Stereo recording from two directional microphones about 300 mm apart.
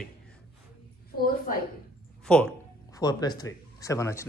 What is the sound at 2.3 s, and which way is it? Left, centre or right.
Speech, centre.